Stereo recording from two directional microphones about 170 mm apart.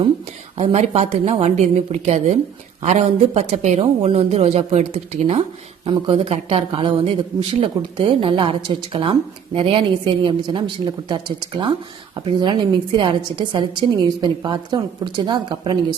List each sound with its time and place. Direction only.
0.5 s a woman's voice: 40° right (ahead or behind)